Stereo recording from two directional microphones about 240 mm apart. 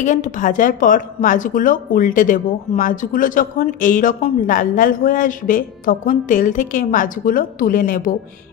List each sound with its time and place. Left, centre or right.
0.0 s speech: left